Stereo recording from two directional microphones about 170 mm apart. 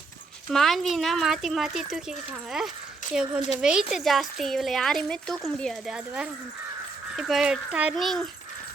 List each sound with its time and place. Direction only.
0.5 s speech: centre (ahead or behind)